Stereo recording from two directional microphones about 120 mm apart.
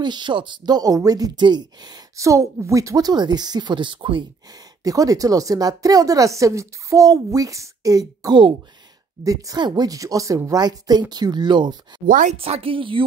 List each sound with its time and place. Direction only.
0.0 s speech: 40° right (ahead or behind)
4.5 s a woman's voice: 30° right (ahead or behind)
12.4 s a woman's voice: 55° right (ahead or behind)